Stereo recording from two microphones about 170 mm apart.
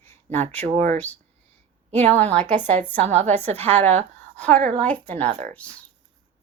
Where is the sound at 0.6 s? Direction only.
40° right (ahead or behind).